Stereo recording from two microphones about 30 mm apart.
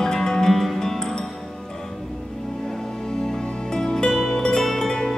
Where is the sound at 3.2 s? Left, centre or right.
Centre.